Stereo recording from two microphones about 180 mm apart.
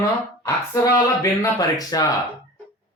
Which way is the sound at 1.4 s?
20° left (ahead or behind).